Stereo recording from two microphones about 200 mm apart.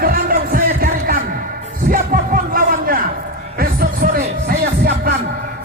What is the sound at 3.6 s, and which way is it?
Music, 50° right (ahead or behind).